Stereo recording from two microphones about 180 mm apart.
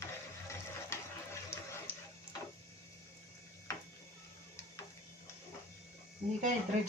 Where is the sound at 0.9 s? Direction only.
15° left (ahead or behind).